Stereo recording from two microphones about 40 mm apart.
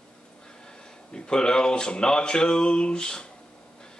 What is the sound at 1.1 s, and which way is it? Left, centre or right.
Speech, left.